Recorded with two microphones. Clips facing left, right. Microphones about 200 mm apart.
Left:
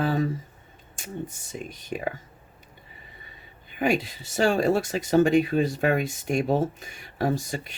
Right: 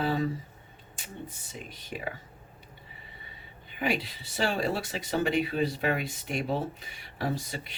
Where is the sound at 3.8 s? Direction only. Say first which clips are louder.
Left 6 dB; 45° left (ahead or behind).